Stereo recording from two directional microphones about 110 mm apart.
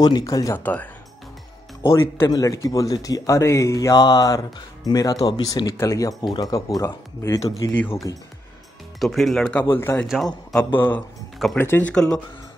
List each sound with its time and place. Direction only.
0.0 s speech: 35° left (ahead or behind)
1.8 s speech: 25° left (ahead or behind)
9.0 s speech: centre (ahead or behind)
9.7 s speech: 20° left (ahead or behind)
10.0 s speech: centre (ahead or behind)
10.8 s speech: 15° left (ahead or behind)
11.9 s speech: 5° left (ahead or behind)